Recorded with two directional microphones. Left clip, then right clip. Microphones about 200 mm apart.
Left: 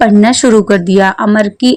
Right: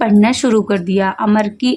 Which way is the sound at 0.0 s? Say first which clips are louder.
Left 6 dB; 20° left (ahead or behind).